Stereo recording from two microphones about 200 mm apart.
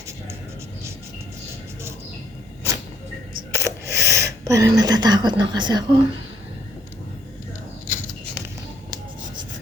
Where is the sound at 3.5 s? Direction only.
15° right (ahead or behind).